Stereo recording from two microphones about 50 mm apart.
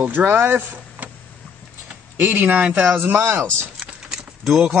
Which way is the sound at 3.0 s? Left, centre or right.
Right.